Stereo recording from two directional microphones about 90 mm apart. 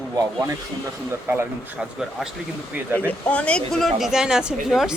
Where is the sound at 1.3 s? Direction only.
25° right (ahead or behind).